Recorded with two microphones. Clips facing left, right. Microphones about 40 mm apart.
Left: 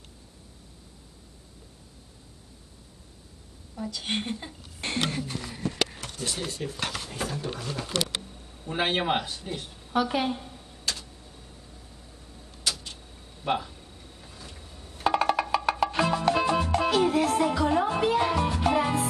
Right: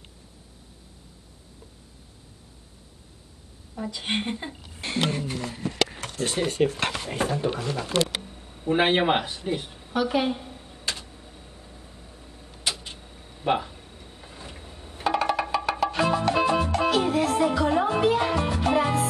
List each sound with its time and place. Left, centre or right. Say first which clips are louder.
3.7 s a woman's voice: right 2 dB; right
6.1 s speech: right 9 dB; right; by 9.9 s centre
9.9 s a sound: right 2 dB; centre; by 15.0 s right
15.0 s music: even; centre